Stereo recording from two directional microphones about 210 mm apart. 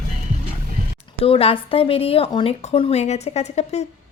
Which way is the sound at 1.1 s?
25° left (ahead or behind).